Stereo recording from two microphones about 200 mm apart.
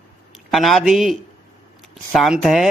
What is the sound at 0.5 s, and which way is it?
Speech, centre (ahead or behind).